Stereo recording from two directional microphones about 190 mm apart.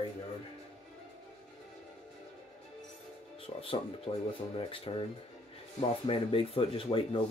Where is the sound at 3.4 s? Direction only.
30° left (ahead or behind).